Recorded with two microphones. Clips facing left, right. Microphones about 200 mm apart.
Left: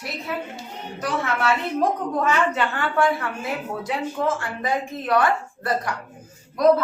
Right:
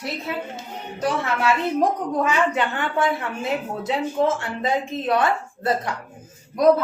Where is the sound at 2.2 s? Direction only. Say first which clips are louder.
Even; 15° right (ahead or behind).